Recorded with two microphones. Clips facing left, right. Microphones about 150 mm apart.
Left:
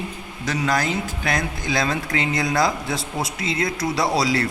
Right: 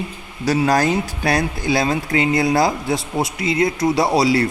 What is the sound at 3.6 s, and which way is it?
Speech, 25° right (ahead or behind).